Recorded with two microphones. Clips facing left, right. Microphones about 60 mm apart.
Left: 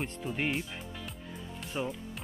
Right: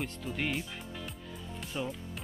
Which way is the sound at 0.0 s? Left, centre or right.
Centre.